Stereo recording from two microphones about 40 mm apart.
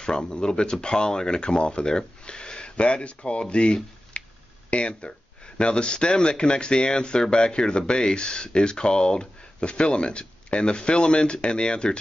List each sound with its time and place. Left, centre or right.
0.0 s speech: centre